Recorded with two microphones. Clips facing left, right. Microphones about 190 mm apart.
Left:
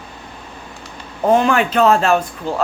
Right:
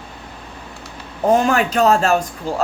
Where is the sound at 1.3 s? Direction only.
40° right (ahead or behind).